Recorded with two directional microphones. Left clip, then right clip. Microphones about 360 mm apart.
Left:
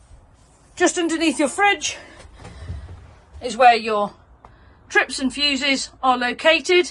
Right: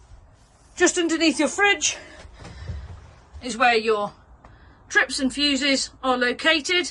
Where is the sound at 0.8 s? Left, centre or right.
Centre.